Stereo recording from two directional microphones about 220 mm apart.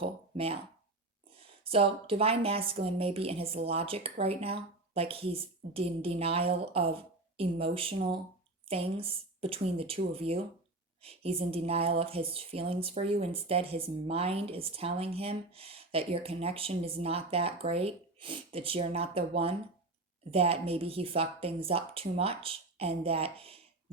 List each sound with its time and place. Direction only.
0.0 s speech: 25° right (ahead or behind)